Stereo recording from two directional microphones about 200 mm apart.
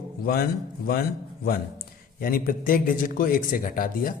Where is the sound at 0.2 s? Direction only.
50° left (ahead or behind).